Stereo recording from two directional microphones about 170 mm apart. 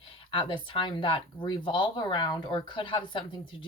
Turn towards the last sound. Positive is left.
turn(degrees=30)  # may be behind; listen again after turning